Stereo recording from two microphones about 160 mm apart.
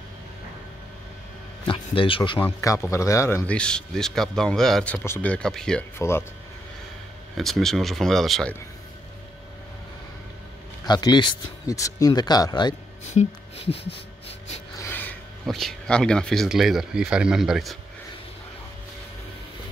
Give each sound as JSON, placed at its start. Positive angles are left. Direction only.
{"t": 1.7, "sound": "speech", "side_deg": 35}
{"t": 2.3, "sound": "a man's voice", "side_deg": 15}
{"t": 5.9, "sound": "a man's voice", "side_deg": 15}
{"t": 7.3, "sound": "speech", "side_deg": 0}
{"t": 10.9, "sound": "speech", "side_deg": 25}
{"t": 13.1, "sound": "speech", "side_deg": 40}
{"t": 14.8, "sound": "a sound", "side_deg": 10}
{"t": 15.4, "sound": "speech", "side_deg": 0}